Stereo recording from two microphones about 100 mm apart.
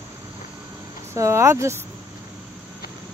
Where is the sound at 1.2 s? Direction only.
30° right (ahead or behind).